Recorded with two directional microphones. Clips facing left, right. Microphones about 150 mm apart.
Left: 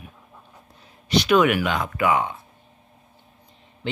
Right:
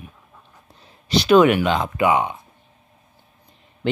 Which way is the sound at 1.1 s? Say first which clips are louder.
Right 4 dB; 30° right (ahead or behind).